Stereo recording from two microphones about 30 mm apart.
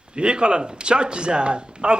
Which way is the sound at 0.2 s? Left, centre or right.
Right.